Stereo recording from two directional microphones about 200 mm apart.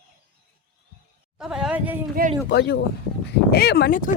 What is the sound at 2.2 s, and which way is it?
Speech, 45° right (ahead or behind).